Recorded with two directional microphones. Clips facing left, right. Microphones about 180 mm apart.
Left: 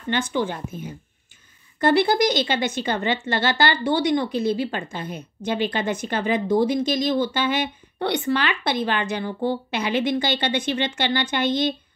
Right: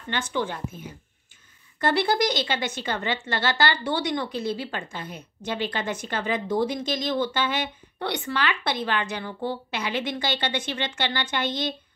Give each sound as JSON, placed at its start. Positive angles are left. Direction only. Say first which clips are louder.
{"t": 0.1, "sound": "speech", "louder": "left 4 dB", "side_deg": 15}
{"t": 1.8, "sound": "speech", "louder": "left 4 dB", "side_deg": 15}